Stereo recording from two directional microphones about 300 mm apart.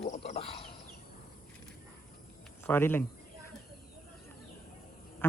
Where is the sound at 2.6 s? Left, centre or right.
Centre.